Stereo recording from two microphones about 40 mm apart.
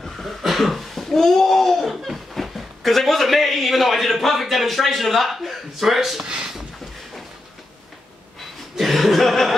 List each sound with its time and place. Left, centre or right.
0.4 s speech: centre
6.2 s speech: right
8.7 s chuckle: centre